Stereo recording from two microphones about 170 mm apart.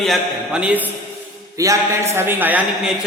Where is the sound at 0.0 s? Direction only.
Centre (ahead or behind).